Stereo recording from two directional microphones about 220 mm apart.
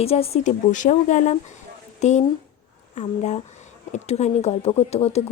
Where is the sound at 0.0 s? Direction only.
25° left (ahead or behind).